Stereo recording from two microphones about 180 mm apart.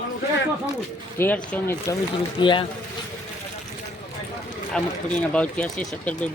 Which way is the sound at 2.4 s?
25° left (ahead or behind).